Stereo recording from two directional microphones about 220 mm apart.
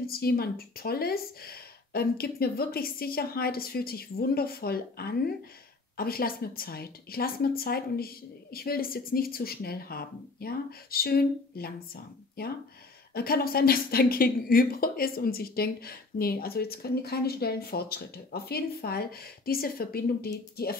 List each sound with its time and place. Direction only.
0.0 s speech: 45° left (ahead or behind)